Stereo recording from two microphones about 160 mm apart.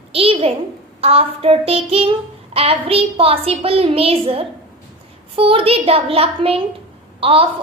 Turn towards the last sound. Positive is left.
turn(degrees=-35)  # may be behind; listen again after turning